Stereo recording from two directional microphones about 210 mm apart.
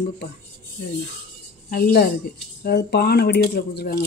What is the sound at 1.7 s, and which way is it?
A woman's voice, 45° left (ahead or behind).